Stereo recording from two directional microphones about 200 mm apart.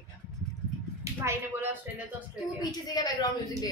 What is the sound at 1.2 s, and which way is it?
Speech, 10° right (ahead or behind).